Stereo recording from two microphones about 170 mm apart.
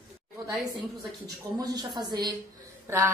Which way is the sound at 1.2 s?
20° right (ahead or behind).